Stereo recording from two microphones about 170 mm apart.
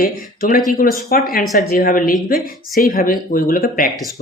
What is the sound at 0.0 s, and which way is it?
Speech, 55° left (ahead or behind).